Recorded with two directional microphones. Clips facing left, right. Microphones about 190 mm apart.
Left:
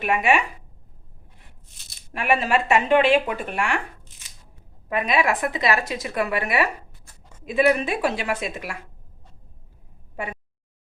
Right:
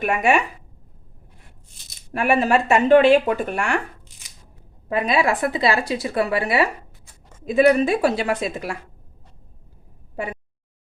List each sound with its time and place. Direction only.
0.0 s speech: 45° right (ahead or behind)
2.1 s speech: 45° right (ahead or behind)
4.9 s speech: 35° right (ahead or behind)